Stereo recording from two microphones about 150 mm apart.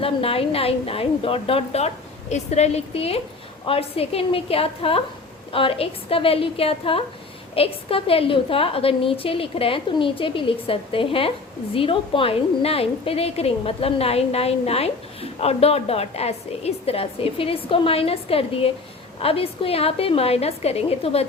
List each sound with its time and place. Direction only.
0.0 s a woman's voice: 40° left (ahead or behind)